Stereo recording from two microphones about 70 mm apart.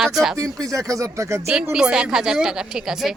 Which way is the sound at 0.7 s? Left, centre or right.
Right.